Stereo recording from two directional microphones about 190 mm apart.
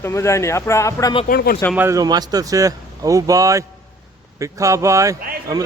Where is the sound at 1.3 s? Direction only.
50° left (ahead or behind).